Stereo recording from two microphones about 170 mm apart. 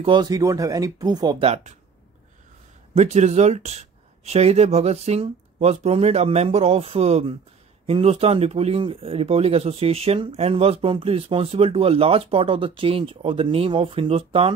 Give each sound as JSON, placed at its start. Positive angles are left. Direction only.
{"t": 0.0, "sound": "speech", "side_deg": -25}
{"t": 1.4, "sound": "speech", "side_deg": -40}
{"t": 2.9, "sound": "speech", "side_deg": -40}